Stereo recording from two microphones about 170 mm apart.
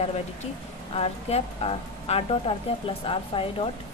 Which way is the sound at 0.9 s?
35° left (ahead or behind).